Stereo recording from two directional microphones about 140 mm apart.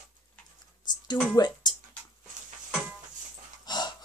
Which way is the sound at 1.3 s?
30° left (ahead or behind).